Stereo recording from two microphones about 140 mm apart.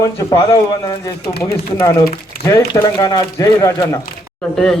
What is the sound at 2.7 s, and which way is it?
Speech, 30° left (ahead or behind).